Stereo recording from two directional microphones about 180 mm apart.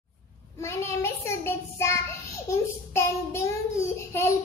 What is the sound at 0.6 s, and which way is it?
Child singing, 15° left (ahead or behind).